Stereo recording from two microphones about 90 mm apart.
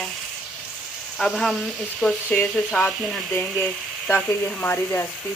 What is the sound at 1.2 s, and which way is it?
Stir, centre (ahead or behind).